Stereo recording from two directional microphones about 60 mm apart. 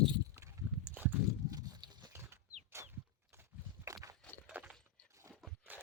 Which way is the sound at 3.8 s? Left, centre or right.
Right.